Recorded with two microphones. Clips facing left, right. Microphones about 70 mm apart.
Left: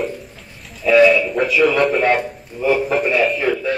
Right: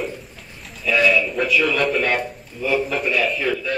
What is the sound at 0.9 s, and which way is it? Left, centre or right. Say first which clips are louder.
Speech: left 8 dB; left.